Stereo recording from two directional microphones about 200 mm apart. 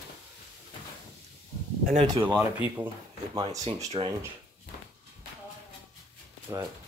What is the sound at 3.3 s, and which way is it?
Speech, 20° right (ahead or behind).